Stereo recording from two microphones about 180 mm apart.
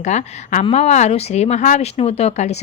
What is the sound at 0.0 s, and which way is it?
Speech, 40° left (ahead or behind).